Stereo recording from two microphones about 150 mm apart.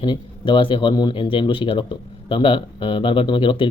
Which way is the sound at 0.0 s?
35° left (ahead or behind).